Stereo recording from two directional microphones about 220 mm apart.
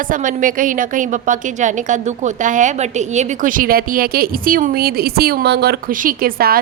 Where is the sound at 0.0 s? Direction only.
35° right (ahead or behind).